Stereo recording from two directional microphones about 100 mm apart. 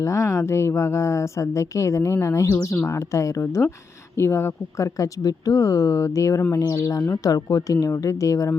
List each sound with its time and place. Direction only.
0.0 s a woman's voice: 30° left (ahead or behind)